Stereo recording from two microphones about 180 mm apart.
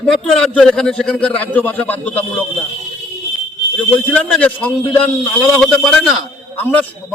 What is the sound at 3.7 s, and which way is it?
A man's voice, 5° left (ahead or behind).